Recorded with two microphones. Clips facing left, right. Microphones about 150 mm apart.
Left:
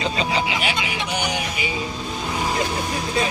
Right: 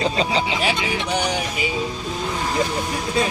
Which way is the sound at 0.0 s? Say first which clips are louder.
Right 2 dB; 35° right (ahead or behind).